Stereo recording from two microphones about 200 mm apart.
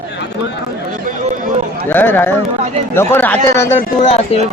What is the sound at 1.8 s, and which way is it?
Speech, 10° left (ahead or behind).